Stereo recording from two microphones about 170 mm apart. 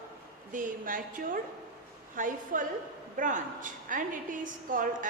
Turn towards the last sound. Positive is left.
turn(degrees=-50)  # may be behind; listen again after turning